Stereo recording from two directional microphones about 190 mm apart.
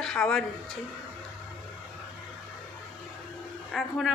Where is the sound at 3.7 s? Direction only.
Centre (ahead or behind).